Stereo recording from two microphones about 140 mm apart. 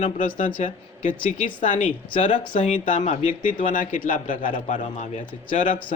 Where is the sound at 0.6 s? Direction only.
65° left (ahead or behind).